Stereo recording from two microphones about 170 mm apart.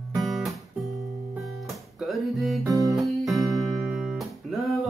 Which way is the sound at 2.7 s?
20° right (ahead or behind).